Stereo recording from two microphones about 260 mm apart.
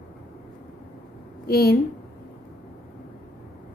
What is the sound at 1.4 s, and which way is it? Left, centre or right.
Speech, left.